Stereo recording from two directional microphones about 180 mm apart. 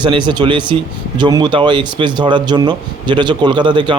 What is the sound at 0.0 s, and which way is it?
Speech, 25° right (ahead or behind).